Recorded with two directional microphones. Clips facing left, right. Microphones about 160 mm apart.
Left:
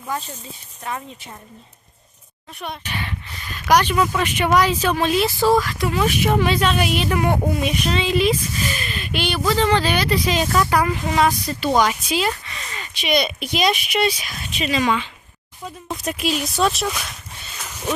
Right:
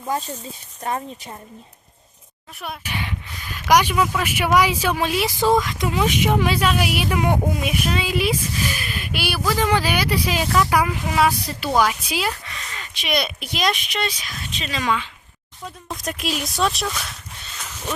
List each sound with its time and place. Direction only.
0.9 s speech: 40° right (ahead or behind)
2.6 s speech: 5° right (ahead or behind)